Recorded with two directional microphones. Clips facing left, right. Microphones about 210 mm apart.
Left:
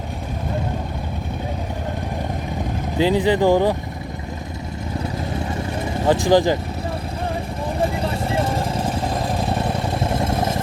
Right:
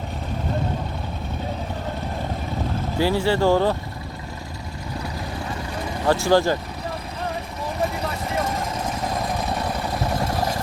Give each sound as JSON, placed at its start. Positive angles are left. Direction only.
{"t": 3.0, "sound": "speech", "side_deg": 20}
{"t": 6.1, "sound": "speech", "side_deg": 15}
{"t": 7.8, "sound": "vehicle", "side_deg": 30}